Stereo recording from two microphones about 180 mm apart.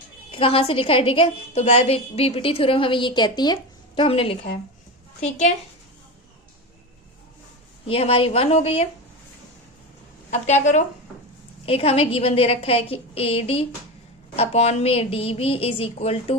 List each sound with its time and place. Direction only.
0.3 s a woman's voice: 30° left (ahead or behind)
7.9 s a woman's voice: 30° left (ahead or behind)
10.4 s a woman's voice: 40° left (ahead or behind)